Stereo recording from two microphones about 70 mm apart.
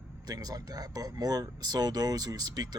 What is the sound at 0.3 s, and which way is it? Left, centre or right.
Speech, right.